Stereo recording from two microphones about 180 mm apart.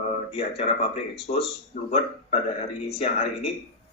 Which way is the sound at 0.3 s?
35° left (ahead or behind).